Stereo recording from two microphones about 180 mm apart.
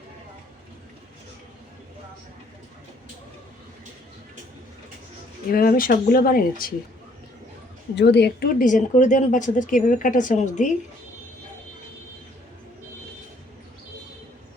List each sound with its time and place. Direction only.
5.5 s speech: 55° left (ahead or behind)
7.9 s speech: 70° left (ahead or behind); by 10.8 s 40° left (ahead or behind)